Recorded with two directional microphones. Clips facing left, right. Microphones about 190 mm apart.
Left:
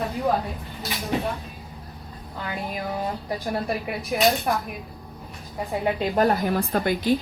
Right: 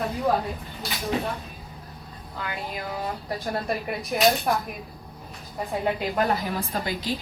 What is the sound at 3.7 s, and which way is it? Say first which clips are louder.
Speech: left 1 dB; centre (ahead or behind).